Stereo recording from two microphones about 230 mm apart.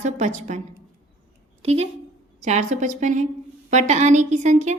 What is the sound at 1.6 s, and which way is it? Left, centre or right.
A woman's voice, right.